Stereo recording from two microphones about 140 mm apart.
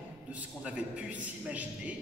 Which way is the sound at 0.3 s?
10° right (ahead or behind).